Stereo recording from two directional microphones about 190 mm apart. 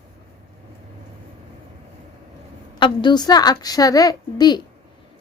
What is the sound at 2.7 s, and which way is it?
A woman's voice, 25° left (ahead or behind).